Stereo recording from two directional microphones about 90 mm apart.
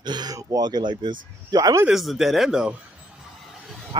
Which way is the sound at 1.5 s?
45° right (ahead or behind).